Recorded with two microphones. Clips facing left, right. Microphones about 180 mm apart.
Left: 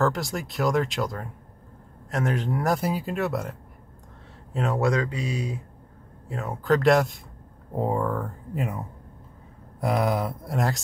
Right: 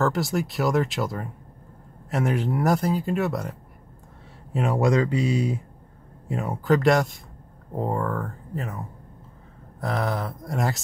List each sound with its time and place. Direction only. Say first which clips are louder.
0.0 s speech: right 2 dB; centre (ahead or behind)
4.6 s speech: right 3 dB; 10° right (ahead or behind)
5.0 s speech: right 6 dB; 25° right (ahead or behind)
6.2 s speech: right 2 dB; 10° right (ahead or behind)